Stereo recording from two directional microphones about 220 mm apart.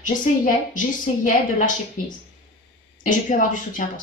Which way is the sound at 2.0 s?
35° left (ahead or behind).